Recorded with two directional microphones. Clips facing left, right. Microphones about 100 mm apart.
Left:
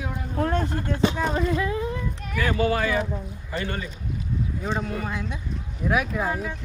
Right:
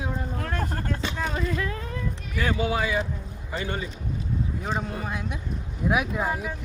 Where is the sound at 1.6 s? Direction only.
20° left (ahead or behind).